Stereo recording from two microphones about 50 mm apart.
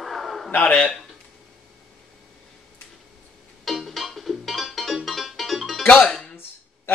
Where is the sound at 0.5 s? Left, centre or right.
Left.